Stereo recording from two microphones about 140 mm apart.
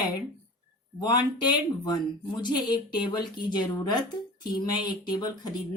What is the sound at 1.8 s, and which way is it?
Speech, 30° left (ahead or behind).